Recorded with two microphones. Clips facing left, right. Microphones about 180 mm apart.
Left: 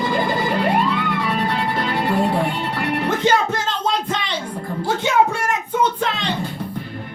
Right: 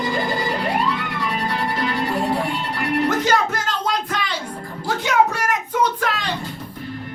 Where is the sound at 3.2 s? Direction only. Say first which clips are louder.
Left 2 dB; 25° left (ahead or behind).